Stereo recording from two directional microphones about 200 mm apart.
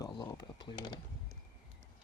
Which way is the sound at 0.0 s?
20° left (ahead or behind).